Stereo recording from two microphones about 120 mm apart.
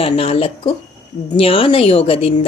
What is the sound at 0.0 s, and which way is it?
A woman's voice, 50° left (ahead or behind).